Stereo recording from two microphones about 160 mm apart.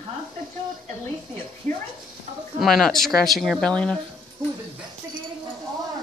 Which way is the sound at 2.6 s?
Centre (ahead or behind).